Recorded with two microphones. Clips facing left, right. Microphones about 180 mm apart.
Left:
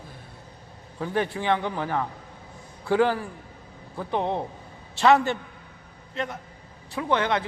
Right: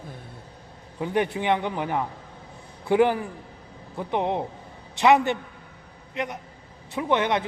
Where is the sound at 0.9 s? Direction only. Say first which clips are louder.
Right 2 dB; 20° right (ahead or behind).